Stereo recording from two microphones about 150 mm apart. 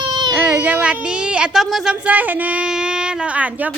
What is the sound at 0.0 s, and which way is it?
Baby cry, 30° right (ahead or behind).